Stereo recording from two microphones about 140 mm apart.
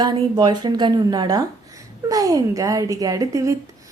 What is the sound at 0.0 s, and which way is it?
A woman's voice, 30° right (ahead or behind).